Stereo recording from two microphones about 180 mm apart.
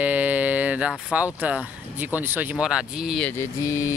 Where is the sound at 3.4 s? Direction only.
15° left (ahead or behind).